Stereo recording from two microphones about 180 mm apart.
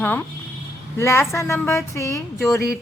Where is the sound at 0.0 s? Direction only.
10° left (ahead or behind).